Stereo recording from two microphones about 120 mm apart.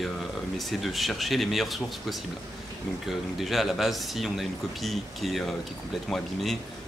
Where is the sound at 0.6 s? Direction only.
Centre (ahead or behind).